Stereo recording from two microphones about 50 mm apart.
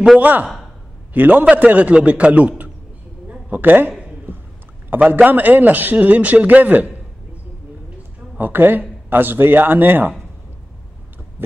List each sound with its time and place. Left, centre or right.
0.2 s a man's voice: right
3.3 s a sound: right
4.8 s a man's voice: right
8.4 s speech: right